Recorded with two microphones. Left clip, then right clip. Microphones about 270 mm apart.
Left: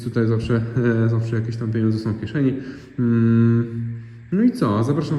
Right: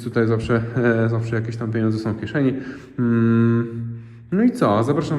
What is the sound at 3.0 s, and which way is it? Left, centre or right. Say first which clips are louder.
Mantra: right 1 dB; right.